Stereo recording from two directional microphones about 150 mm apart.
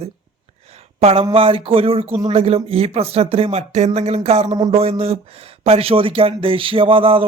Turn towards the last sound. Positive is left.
turn(degrees=-35)  # may be behind; listen again after turning